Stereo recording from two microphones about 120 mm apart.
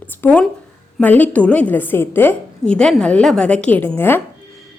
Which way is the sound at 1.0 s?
15° left (ahead or behind).